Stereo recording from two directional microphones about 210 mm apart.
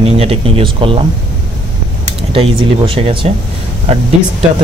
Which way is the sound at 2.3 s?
25° right (ahead or behind).